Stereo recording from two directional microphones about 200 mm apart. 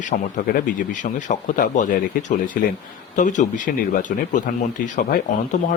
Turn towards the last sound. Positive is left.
turn(degrees=35)  # may be behind; listen again after turning